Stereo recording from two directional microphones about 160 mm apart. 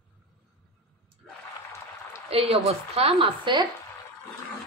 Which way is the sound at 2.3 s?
40° right (ahead or behind).